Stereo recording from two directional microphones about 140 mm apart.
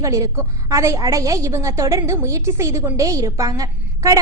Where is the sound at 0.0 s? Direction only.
20° right (ahead or behind).